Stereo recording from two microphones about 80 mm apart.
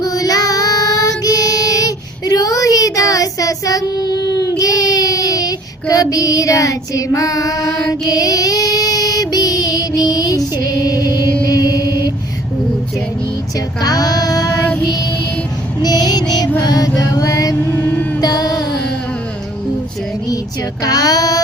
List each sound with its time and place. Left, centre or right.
0.0 s child singing: left
7.6 s music: centre
8.0 s child singing: left
13.8 s music: left
15.8 s music: left
16.6 s mantra: left
18.2 s music: left
20.8 s child singing: left